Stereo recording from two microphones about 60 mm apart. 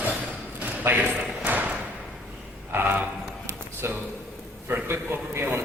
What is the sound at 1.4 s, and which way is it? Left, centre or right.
Thump, right.